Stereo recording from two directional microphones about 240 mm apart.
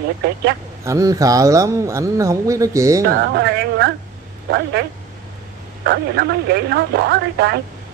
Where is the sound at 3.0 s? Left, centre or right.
Right.